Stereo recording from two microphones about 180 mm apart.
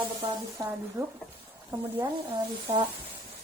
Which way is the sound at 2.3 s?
30° right (ahead or behind).